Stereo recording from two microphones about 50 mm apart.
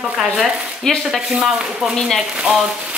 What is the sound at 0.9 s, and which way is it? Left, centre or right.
Speech, centre.